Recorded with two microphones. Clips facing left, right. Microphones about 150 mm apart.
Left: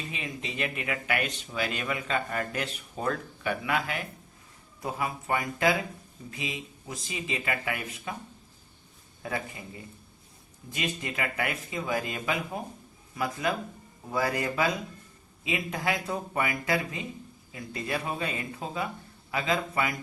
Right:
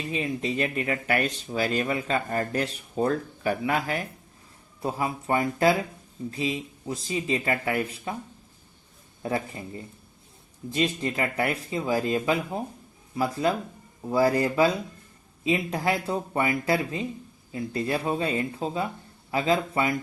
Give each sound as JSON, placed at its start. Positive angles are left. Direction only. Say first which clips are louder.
{"t": 0.1, "sound": "speech", "louder": "right 9 dB", "side_deg": -40}
{"t": 9.2, "sound": "speech", "louder": "right 5 dB", "side_deg": -35}
{"t": 10.7, "sound": "a man's voice", "louder": "right 7 dB", "side_deg": -35}